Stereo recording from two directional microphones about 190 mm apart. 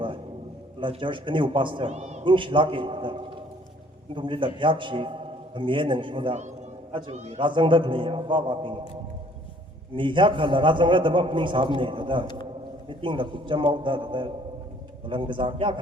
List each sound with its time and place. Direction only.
0.8 s a man's voice: 25° right (ahead or behind)
9.9 s a man's voice: 25° right (ahead or behind)